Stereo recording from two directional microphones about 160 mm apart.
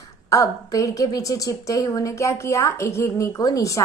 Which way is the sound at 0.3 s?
20° left (ahead or behind).